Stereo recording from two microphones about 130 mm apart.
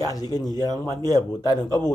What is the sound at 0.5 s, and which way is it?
Speech, 30° right (ahead or behind).